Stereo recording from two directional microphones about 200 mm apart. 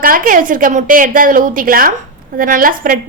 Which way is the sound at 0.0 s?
45° right (ahead or behind).